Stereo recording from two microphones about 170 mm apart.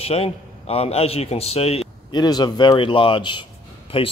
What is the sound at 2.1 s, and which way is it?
A man's voice, 25° left (ahead or behind).